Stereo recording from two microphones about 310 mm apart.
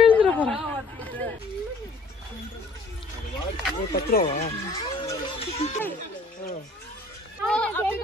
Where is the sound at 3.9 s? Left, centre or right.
Left.